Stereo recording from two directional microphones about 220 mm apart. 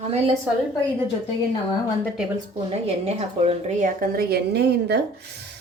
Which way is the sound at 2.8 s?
25° right (ahead or behind).